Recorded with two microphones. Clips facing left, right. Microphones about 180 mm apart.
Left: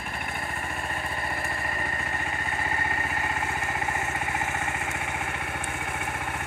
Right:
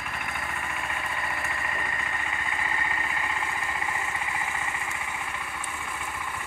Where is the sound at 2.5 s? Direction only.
50° left (ahead or behind).